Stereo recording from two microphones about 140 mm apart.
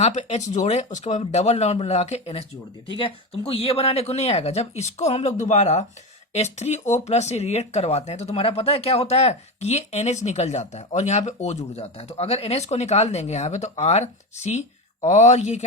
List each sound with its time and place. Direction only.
0.0 s speech: 55° left (ahead or behind)